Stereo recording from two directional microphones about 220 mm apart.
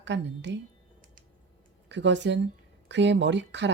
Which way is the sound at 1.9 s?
55° right (ahead or behind).